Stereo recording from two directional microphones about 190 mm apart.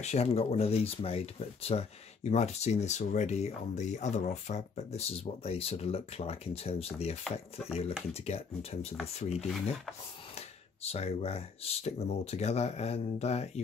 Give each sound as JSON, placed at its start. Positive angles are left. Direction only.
{"t": 0.0, "sound": "speech", "side_deg": 35}